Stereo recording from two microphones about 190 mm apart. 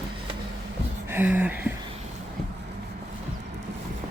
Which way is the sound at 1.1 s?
10° right (ahead or behind).